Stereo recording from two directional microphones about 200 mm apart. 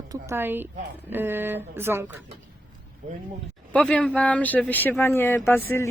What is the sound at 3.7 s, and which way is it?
Speech, 5° left (ahead or behind).